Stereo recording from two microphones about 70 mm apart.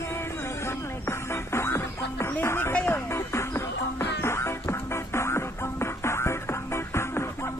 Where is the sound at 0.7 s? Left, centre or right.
Left.